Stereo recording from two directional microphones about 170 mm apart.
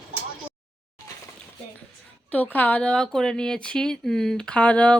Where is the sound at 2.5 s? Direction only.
10° left (ahead or behind).